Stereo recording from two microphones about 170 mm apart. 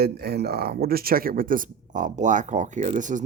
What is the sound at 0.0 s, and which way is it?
Speech, 70° right (ahead or behind).